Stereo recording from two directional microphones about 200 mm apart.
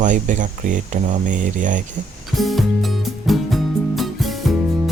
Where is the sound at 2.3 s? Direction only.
Centre (ahead or behind).